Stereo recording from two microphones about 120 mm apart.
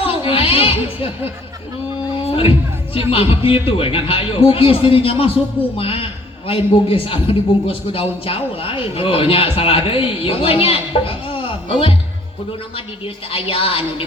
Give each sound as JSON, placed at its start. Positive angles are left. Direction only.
{"t": 0.0, "sound": "a sound", "side_deg": 50}
{"t": 3.1, "sound": "a man's voice", "side_deg": 50}
{"t": 13.3, "sound": "a man's voice", "side_deg": 50}